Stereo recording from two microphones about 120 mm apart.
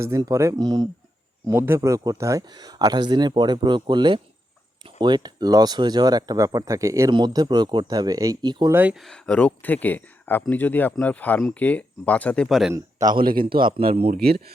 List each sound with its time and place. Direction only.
0.0 s speech: 25° right (ahead or behind)
1.5 s speech: 20° right (ahead or behind)
7.1 s speech: 40° right (ahead or behind)
8.7 s speech: 15° right (ahead or behind)
9.0 s speech: 5° left (ahead or behind)
12.5 s speech: centre (ahead or behind)
12.7 s a man's voice: 30° right (ahead or behind)
13.7 s speech: 60° right (ahead or behind)